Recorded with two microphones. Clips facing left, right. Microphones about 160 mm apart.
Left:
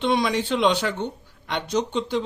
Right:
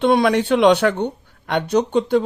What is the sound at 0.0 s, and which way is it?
Speech, 55° right (ahead or behind).